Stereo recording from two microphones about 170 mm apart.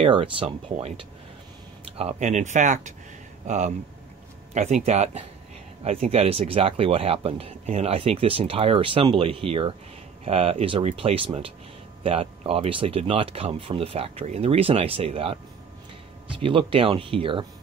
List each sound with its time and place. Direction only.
0.0 s speech: 30° right (ahead or behind)